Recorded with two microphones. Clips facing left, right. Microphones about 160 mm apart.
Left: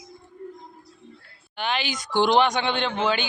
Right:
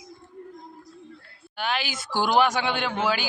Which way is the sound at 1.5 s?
5° right (ahead or behind).